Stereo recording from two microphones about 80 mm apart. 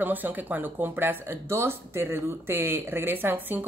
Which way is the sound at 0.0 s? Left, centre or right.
Right.